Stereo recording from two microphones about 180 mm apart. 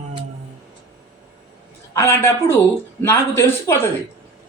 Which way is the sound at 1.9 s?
15° left (ahead or behind).